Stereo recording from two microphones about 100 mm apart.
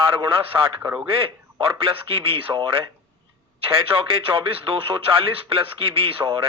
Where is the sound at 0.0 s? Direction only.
65° right (ahead or behind).